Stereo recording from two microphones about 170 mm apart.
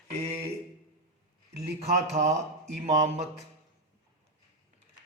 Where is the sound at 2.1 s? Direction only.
40° right (ahead or behind).